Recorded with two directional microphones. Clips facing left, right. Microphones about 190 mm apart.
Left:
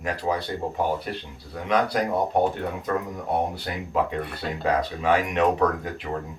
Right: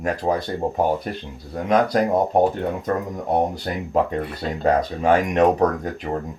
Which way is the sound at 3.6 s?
45° right (ahead or behind).